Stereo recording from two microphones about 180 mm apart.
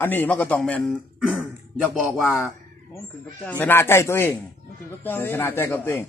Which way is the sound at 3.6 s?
15° left (ahead or behind).